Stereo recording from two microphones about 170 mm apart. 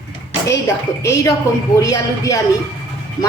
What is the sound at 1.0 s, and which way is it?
A woman's voice, 15° left (ahead or behind).